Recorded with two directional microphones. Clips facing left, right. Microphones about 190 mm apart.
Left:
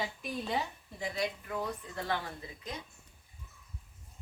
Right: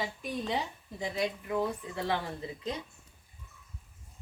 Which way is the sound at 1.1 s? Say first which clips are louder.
Right 5 dB; 20° right (ahead or behind).